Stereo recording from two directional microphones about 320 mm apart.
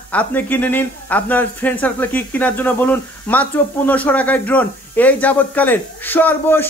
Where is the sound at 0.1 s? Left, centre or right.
Centre.